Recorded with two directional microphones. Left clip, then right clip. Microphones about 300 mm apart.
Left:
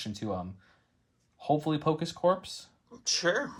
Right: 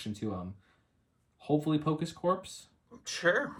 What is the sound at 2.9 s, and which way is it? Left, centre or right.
Speech, centre.